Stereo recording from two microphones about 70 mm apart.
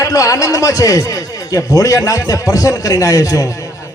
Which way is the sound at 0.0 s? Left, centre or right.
Left.